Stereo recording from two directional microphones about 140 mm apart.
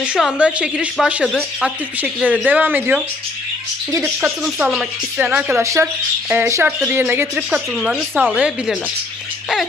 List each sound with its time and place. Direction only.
0.0 s a woman's voice: 5° right (ahead or behind)
4.4 s speech: 5° right (ahead or behind)
7.8 s speech: centre (ahead or behind)